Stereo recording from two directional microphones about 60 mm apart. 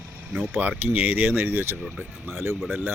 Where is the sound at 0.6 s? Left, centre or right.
Right.